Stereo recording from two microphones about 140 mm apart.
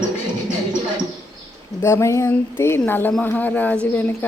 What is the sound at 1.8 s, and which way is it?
Speech, 20° left (ahead or behind).